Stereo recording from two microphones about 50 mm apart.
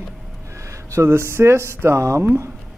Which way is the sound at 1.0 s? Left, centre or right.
Right.